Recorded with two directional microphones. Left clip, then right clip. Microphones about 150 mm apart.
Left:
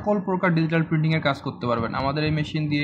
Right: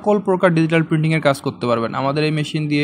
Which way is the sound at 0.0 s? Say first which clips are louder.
Right 7 dB; 45° right (ahead or behind).